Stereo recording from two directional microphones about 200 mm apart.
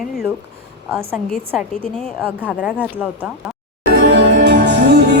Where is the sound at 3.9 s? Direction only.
60° right (ahead or behind).